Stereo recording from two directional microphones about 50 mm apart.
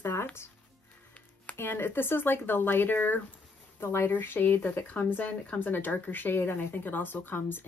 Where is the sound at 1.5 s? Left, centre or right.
Left.